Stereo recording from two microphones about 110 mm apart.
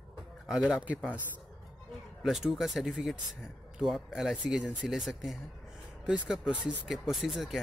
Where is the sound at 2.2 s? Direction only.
5° right (ahead or behind).